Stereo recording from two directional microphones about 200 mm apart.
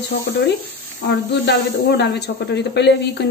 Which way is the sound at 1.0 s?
60° left (ahead or behind).